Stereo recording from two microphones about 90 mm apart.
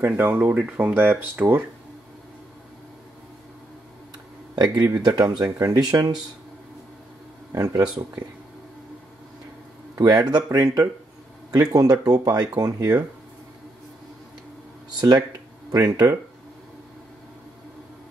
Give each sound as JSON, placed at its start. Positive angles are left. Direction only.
{"t": 0.0, "sound": "speech", "side_deg": -25}
{"t": 4.9, "sound": "speech", "side_deg": -45}
{"t": 7.5, "sound": "speech", "side_deg": -40}
{"t": 9.9, "sound": "speech", "side_deg": -45}
{"t": 15.0, "sound": "speech", "side_deg": -50}